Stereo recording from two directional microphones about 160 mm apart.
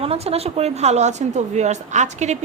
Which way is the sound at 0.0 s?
40° right (ahead or behind).